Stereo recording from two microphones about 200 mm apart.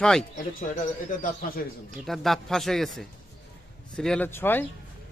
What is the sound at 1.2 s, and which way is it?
Speech, 45° left (ahead or behind).